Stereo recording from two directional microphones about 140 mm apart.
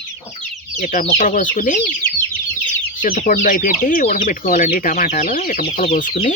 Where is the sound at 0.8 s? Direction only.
60° left (ahead or behind).